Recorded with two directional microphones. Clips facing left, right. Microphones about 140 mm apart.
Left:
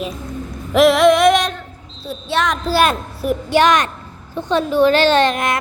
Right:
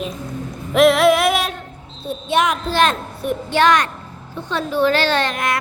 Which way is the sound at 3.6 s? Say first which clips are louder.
Left 1 dB; 20° left (ahead or behind).